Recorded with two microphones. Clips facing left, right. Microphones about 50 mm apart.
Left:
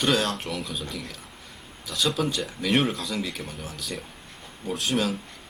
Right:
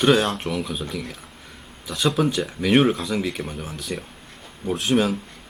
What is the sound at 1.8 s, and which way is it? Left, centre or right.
Speech, right.